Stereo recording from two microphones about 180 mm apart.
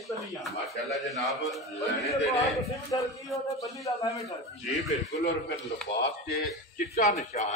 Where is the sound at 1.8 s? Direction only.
15° left (ahead or behind).